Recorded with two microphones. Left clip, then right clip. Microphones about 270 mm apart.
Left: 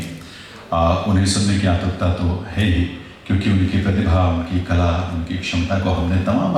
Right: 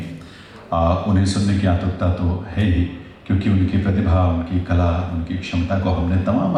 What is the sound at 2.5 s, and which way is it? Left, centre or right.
A man's voice, centre.